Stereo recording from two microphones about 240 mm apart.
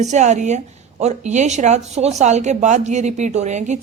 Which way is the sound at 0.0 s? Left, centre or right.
Right.